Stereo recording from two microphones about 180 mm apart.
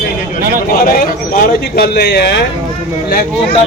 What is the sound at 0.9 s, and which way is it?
Speech, 55° left (ahead or behind).